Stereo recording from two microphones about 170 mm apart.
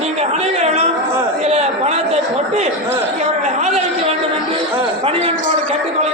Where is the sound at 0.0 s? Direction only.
40° right (ahead or behind).